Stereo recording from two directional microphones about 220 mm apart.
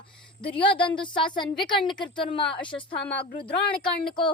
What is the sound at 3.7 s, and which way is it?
Speech, 5° left (ahead or behind).